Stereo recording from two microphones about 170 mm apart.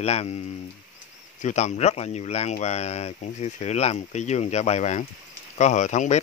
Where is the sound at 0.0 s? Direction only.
40° left (ahead or behind).